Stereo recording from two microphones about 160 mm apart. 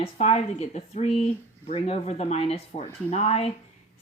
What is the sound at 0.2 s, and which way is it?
Speech, 40° left (ahead or behind).